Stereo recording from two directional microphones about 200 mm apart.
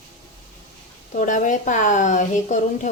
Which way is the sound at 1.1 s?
40° left (ahead or behind).